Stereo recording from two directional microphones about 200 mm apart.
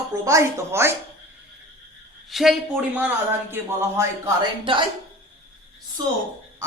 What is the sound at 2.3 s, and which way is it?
A man's voice, centre (ahead or behind).